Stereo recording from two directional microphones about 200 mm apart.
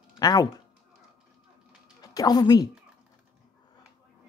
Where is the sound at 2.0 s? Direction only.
20° left (ahead or behind).